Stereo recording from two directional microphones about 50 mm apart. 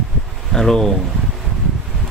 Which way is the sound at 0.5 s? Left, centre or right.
Centre.